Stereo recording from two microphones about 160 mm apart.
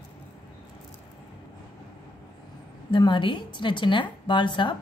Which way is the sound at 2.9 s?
30° left (ahead or behind).